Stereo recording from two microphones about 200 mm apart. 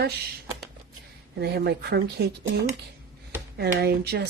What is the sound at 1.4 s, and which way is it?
Speech, 55° right (ahead or behind).